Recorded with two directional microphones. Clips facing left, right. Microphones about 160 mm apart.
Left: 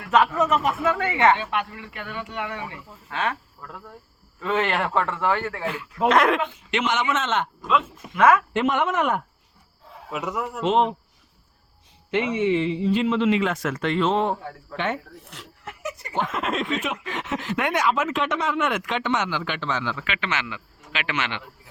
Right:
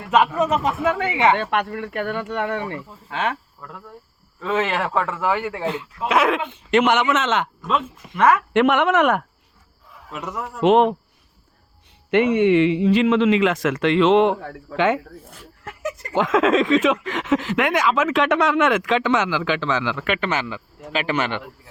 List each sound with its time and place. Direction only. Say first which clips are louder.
0.1 s speech: right 2 dB; 15° right (ahead or behind)
1.4 s speech: right 5 dB; 60° right (ahead or behind)
3.1 s speech: right 2 dB; 20° right (ahead or behind)
4.4 s speech: right 2 dB; centre (ahead or behind); by 5.9 s 20° right (ahead or behind)
6.1 s speech: even; 5° right (ahead or behind)
6.7 s a man's voice: right 8 dB; 50° right (ahead or behind); by 7.4 s 90° right
8.5 s a man's voice: right 6 dB; 70° right (ahead or behind)
10.1 s speech: left 2 dB; centre (ahead or behind)
10.6 s speech: right 6 dB; 65° right (ahead or behind)
12.1 s speech: right 6 dB; 60° right (ahead or behind); by 15.0 s 90° right
15.2 s speech: even; 80° left
16.0 s speech: right 9 dB; 90° right
20.1 s speech: right 6 dB; 45° right (ahead or behind)